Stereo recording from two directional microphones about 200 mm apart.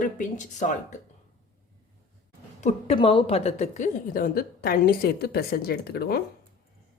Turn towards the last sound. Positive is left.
turn(degrees=50)  # may be behind; listen again after turning